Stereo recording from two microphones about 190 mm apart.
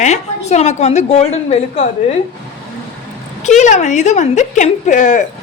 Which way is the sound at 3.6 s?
40° left (ahead or behind).